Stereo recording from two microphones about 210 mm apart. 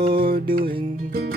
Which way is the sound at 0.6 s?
25° right (ahead or behind).